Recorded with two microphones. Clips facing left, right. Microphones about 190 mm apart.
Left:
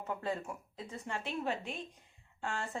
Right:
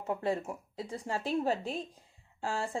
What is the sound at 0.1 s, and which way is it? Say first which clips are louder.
Speech: right 6 dB; 30° right (ahead or behind).